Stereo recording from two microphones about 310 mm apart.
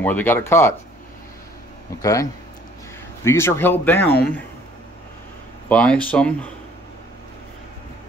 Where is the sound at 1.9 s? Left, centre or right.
Centre.